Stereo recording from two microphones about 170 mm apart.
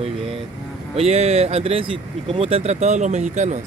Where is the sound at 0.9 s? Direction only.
40° right (ahead or behind).